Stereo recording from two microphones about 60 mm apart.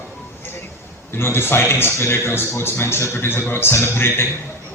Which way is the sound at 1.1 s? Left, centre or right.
Left.